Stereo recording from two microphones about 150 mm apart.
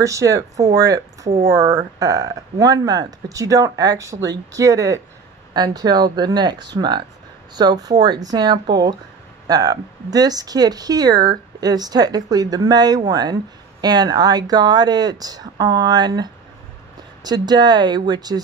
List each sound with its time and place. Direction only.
0.0 s speech: 20° right (ahead or behind)